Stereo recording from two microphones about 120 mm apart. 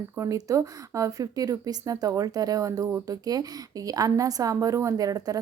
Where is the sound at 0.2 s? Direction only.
30° right (ahead or behind).